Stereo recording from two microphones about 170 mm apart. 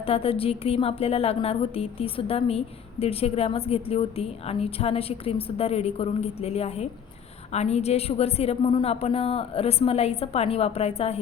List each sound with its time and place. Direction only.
0.0 s a woman's voice: 35° left (ahead or behind)